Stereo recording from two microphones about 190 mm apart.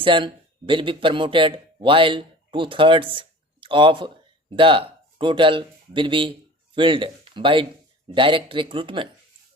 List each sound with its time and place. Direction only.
0.0 s speech: 25° right (ahead or behind)